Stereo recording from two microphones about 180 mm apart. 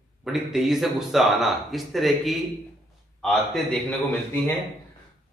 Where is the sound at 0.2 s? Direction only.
Centre (ahead or behind).